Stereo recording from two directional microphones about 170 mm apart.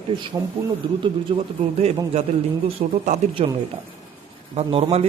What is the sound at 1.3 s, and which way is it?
Speech, 35° right (ahead or behind).